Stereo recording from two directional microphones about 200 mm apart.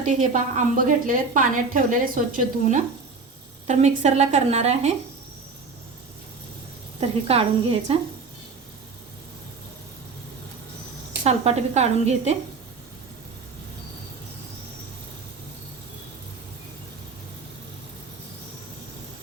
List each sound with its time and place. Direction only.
0.0 s a woman's voice: 40° right (ahead or behind)
7.3 s a woman's voice: 30° right (ahead or behind)
11.2 s a woman's voice: 30° right (ahead or behind)